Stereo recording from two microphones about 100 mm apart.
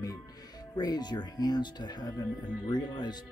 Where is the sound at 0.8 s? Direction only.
45° left (ahead or behind).